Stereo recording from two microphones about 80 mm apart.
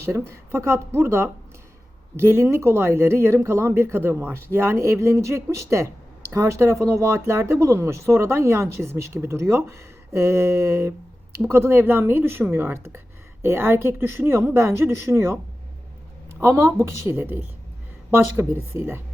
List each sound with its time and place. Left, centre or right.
0.0 s speech: right
16.4 s speech: right